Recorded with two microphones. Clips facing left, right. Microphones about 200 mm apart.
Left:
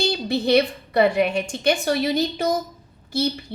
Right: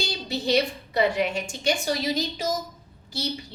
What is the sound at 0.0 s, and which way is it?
A woman's voice, 55° left (ahead or behind).